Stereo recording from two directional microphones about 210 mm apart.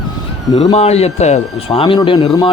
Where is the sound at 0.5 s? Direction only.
30° left (ahead or behind).